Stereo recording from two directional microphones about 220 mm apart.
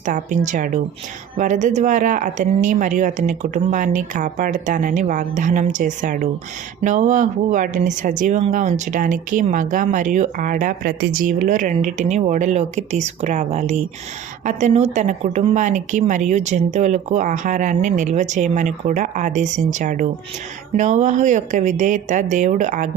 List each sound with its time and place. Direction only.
0.0 s speech: 35° right (ahead or behind)